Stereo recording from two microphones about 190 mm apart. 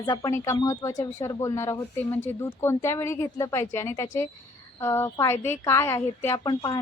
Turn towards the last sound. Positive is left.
turn(degrees=20)  # may be behind; listen again after turning